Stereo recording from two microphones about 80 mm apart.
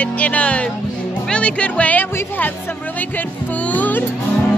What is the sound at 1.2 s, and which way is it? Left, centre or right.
Speech, centre.